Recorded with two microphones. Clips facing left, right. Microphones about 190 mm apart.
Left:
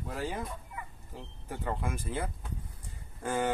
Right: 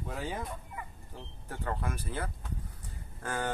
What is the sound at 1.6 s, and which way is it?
Speech, 10° left (ahead or behind).